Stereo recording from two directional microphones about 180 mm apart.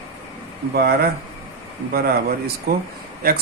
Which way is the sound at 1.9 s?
55° right (ahead or behind).